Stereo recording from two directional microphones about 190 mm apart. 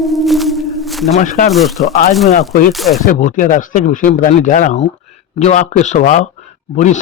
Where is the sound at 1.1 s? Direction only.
45° left (ahead or behind).